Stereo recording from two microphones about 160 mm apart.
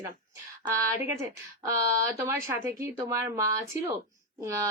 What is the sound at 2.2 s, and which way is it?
A woman's voice, 15° right (ahead or behind).